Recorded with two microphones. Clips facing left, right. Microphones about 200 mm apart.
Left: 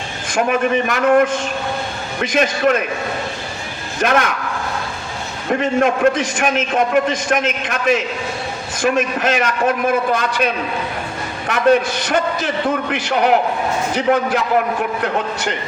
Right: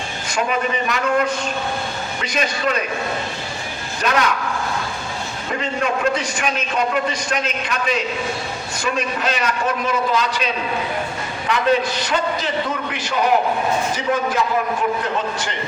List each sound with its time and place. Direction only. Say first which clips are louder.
0.3 s a man's voice: left 5 dB; 50° left (ahead or behind)
4.0 s a man's voice: left 3 dB; 50° left (ahead or behind)
5.5 s a man's voice: left 7 dB; 55° left (ahead or behind)